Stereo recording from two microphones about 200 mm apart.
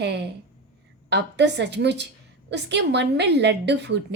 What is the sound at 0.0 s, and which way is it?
A woman's voice, 55° right (ahead or behind).